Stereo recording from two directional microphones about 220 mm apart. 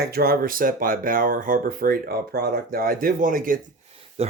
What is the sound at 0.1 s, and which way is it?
Speech, 45° right (ahead or behind).